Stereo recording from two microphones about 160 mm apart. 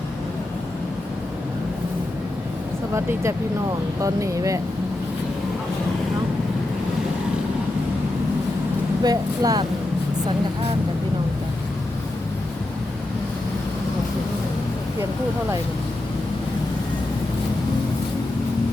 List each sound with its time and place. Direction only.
2.9 s speech: 15° right (ahead or behind)
9.0 s speech: 25° right (ahead or behind)